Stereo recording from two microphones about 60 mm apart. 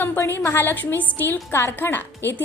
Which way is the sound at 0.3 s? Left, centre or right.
Left.